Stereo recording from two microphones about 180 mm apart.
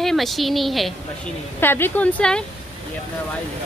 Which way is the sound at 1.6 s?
10° left (ahead or behind).